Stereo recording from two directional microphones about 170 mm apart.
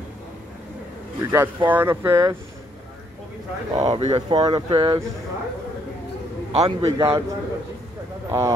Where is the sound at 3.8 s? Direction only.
40° right (ahead or behind).